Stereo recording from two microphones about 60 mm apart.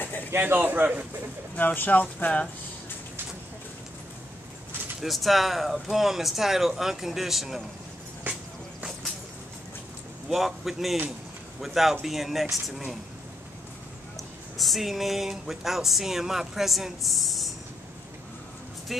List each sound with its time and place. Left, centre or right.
0.3 s speech: right
1.6 s speech: left
5.0 s speech: centre
8.3 s music: right
10.3 s speech: centre
14.6 s speech: centre
18.9 s speech: centre